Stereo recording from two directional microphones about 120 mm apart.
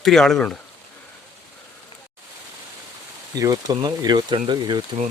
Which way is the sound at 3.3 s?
30° right (ahead or behind).